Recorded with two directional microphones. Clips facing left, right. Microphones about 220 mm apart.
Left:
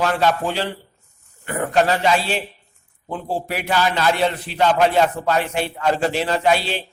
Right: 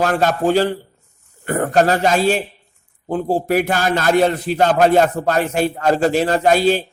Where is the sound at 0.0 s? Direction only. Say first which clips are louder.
Right 3 dB; 45° right (ahead or behind).